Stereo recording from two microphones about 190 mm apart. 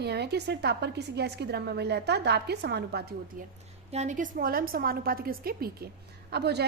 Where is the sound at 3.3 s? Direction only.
45° right (ahead or behind).